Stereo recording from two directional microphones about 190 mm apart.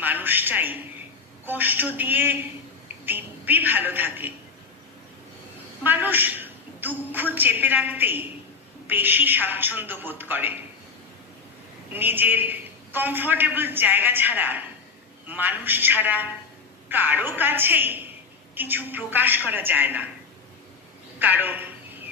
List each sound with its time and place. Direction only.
0.0 s a woman's voice: 10° right (ahead or behind)
5.9 s a man's voice: 10° right (ahead or behind)
11.9 s a man's voice: 10° right (ahead or behind)
21.2 s a man's voice: 10° right (ahead or behind)